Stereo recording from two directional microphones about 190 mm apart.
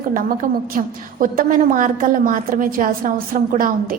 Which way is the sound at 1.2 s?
45° right (ahead or behind).